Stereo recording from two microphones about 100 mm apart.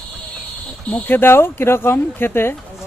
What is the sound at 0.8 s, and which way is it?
Speech, 15° left (ahead or behind).